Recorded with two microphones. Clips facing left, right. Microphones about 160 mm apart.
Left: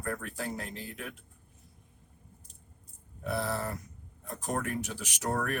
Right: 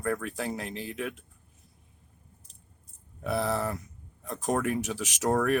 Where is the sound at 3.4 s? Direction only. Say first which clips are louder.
Right 5 dB; 80° right.